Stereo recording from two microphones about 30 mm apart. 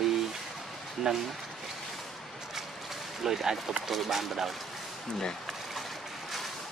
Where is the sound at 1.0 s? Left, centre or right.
Centre.